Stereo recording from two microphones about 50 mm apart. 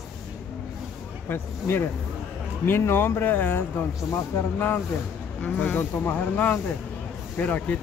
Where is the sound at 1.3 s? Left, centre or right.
Left.